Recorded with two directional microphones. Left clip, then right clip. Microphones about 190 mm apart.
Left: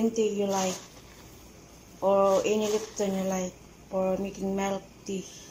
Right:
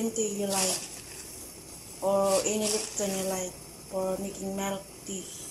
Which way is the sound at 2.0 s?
Centre (ahead or behind).